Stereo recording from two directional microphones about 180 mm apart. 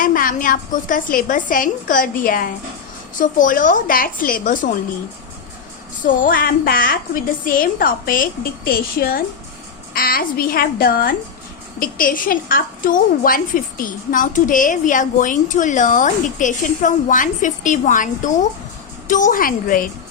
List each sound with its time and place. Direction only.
0.0 s a woman's voice: 50° left (ahead or behind)
6.2 s a woman's voice: 50° left (ahead or behind)